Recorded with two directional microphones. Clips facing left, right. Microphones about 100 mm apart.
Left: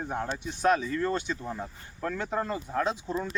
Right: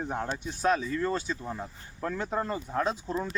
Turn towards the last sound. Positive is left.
turn(degrees=0)  # may be behind; listen again after turning